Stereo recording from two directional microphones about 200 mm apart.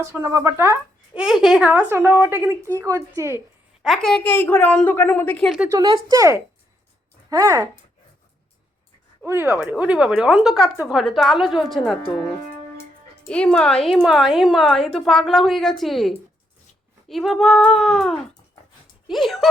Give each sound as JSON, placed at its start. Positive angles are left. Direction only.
{"t": 0.0, "sound": "speech", "side_deg": -15}
{"t": 3.8, "sound": "a woman's voice", "side_deg": 0}
{"t": 5.7, "sound": "speech", "side_deg": -25}
{"t": 9.2, "sound": "a woman's voice", "side_deg": -10}
{"t": 13.2, "sound": "a woman's voice", "side_deg": 5}